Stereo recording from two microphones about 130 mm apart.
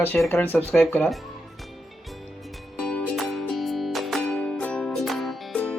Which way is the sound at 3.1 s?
Centre (ahead or behind).